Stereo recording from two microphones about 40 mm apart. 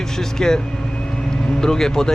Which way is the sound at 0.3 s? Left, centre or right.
Centre.